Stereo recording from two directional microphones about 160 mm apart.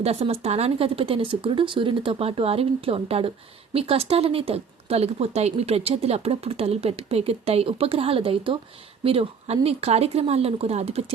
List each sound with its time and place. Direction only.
0.0 s speech: 40° right (ahead or behind)